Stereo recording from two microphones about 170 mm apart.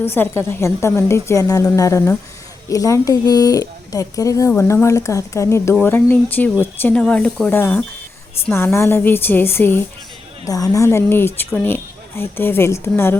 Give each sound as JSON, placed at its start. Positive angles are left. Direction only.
{"t": 0.0, "sound": "a woman's voice", "side_deg": 15}